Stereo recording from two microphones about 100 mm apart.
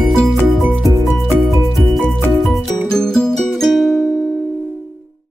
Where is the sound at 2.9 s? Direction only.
5° left (ahead or behind).